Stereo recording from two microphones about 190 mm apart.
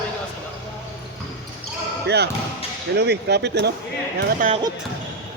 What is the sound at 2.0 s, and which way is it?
Speech, 60° right (ahead or behind).